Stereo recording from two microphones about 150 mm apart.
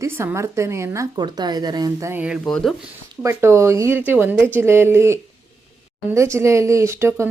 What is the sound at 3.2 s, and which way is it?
A woman's voice, 15° right (ahead or behind).